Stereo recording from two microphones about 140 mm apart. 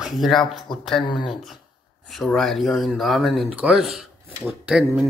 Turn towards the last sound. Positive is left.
turn(degrees=-5)  # may be behind; listen again after turning